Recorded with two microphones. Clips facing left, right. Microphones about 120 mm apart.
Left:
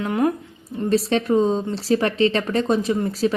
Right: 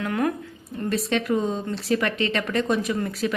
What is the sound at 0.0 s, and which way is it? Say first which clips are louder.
A woman's voice: left 4 dB; 25° left (ahead or behind).